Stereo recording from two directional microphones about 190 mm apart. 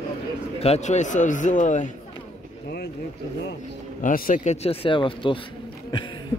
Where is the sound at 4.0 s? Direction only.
45° left (ahead or behind).